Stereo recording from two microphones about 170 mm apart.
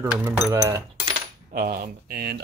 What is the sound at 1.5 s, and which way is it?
Speech, 55° right (ahead or behind).